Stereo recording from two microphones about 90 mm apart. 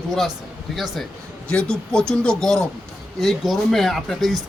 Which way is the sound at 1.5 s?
10° left (ahead or behind).